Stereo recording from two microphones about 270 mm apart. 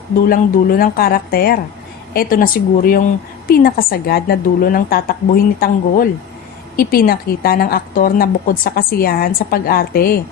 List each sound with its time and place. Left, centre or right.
0.3 s a woman's voice: left